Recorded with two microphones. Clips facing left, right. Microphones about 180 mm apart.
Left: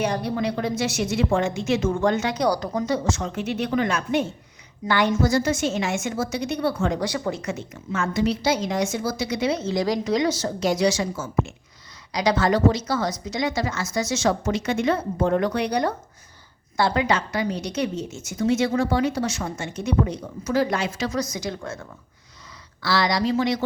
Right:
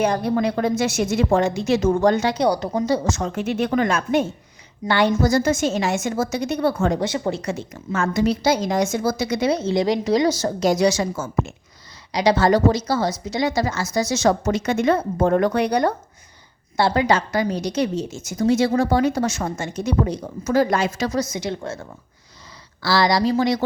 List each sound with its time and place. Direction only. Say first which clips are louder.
0.0 s a woman's voice: right 4 dB; 50° right (ahead or behind)
4.9 s a woman's voice: right 3 dB; 30° right (ahead or behind)
7.0 s a woman's voice: right 3 dB; 25° right (ahead or behind); by 9.6 s 40° right (ahead or behind)
9.6 s a woman's voice: right 4 dB; 25° right (ahead or behind); by 11.5 s 45° right (ahead or behind)
12.1 s a woman's voice: right 4 dB; 30° right (ahead or behind); by 15.9 s 50° right (ahead or behind)
16.7 s a woman's voice: right 3 dB; 30° right (ahead or behind)
17.9 s speech: right 4 dB; 90° right
18.3 s a woman's voice: right 3 dB; 35° right (ahead or behind)
21.2 s a woman's voice: right 3 dB; 25° right (ahead or behind)